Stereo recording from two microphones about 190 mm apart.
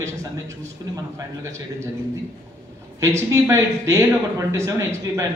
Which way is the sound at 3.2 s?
15° right (ahead or behind).